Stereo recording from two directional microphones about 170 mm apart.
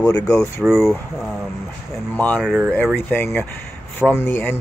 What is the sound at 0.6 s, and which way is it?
Speech, centre (ahead or behind).